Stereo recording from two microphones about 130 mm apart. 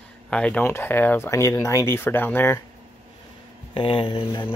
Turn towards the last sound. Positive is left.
turn(degrees=45)  # may be behind; listen again after turning